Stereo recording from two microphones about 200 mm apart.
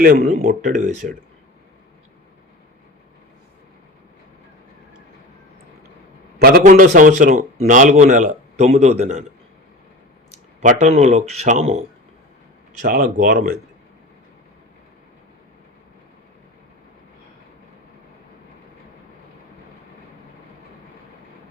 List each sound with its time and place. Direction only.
0.0 s a man's voice: 45° right (ahead or behind)
6.4 s a man's voice: 45° right (ahead or behind)
10.6 s a man's voice: 35° right (ahead or behind)
12.8 s speech: 45° right (ahead or behind)